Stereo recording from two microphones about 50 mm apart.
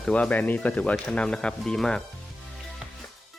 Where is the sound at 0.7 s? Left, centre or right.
Centre.